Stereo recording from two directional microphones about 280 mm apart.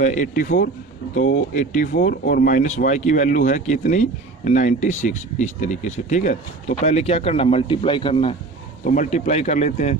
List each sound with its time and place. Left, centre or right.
0.0 s speech: left